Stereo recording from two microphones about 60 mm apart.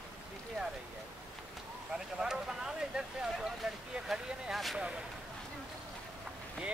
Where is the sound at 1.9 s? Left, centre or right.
Centre.